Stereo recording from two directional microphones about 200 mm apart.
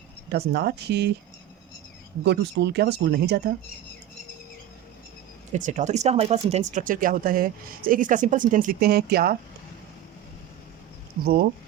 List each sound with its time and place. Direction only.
0.3 s speech: 55° right (ahead or behind)
2.2 s speech: 60° right (ahead or behind)
5.5 s speech: 40° right (ahead or behind)